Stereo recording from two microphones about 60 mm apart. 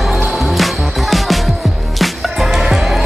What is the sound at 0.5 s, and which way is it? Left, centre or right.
Music, centre.